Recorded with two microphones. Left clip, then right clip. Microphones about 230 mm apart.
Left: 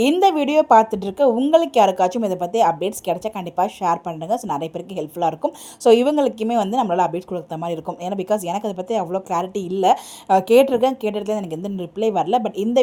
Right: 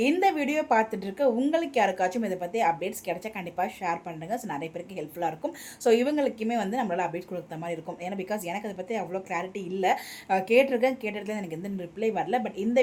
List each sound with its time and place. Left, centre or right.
0.0 s a woman's voice: left